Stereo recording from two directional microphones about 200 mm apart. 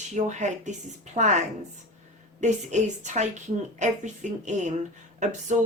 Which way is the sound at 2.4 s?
35° right (ahead or behind).